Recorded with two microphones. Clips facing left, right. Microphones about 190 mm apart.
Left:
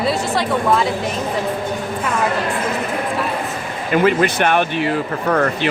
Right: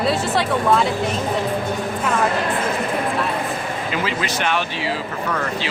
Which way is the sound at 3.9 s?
55° left (ahead or behind).